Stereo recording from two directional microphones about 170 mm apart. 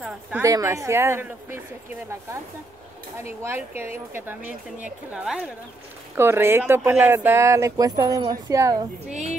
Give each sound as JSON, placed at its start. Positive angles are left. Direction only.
{"t": 0.4, "sound": "speech", "side_deg": -20}
{"t": 3.4, "sound": "speech", "side_deg": -15}
{"t": 6.1, "sound": "speech", "side_deg": -15}